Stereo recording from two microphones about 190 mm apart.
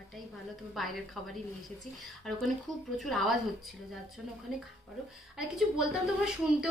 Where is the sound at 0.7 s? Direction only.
Centre (ahead or behind).